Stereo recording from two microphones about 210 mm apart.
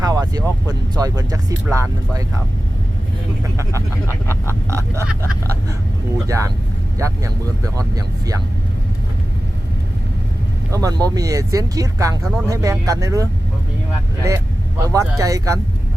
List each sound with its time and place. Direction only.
0.0 s speech: 15° right (ahead or behind)
3.6 s speech: 15° right (ahead or behind)
4.1 s a sound: 10° left (ahead or behind)
4.7 s speech: 15° right (ahead or behind)
6.2 s speech: 15° right (ahead or behind)
10.7 s speech: 15° right (ahead or behind)